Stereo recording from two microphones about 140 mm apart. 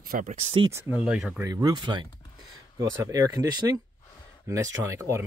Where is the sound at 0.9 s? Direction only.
5° right (ahead or behind).